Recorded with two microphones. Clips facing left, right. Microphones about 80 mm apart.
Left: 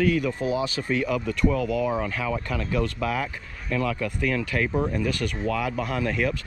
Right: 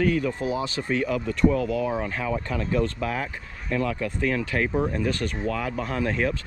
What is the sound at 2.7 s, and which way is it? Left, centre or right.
Speech, left.